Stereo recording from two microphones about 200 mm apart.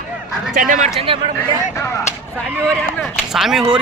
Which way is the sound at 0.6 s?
40° right (ahead or behind).